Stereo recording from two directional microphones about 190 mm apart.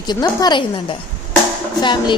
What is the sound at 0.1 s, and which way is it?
A woman's voice, 20° left (ahead or behind).